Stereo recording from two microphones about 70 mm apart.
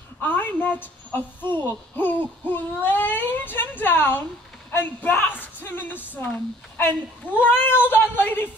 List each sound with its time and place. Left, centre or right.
0.2 s speech: left